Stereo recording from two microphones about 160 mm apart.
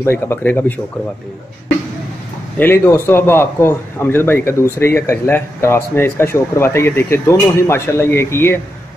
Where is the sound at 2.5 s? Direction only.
10° left (ahead or behind).